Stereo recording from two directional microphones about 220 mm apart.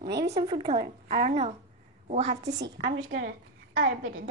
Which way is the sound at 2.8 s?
45° right (ahead or behind).